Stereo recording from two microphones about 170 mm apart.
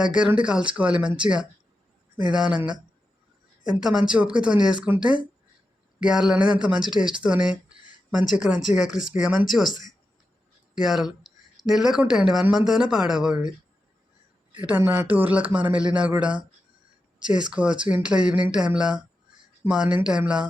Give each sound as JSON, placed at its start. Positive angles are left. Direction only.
{"t": 0.0, "sound": "speech", "side_deg": -5}
{"t": 2.3, "sound": "speech", "side_deg": -5}
{"t": 10.8, "sound": "speech", "side_deg": 0}
{"t": 14.6, "sound": "speech", "side_deg": -10}
{"t": 17.2, "sound": "speech", "side_deg": -25}
{"t": 17.5, "sound": "speech", "side_deg": -5}